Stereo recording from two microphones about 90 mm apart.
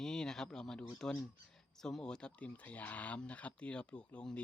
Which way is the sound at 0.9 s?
5° left (ahead or behind).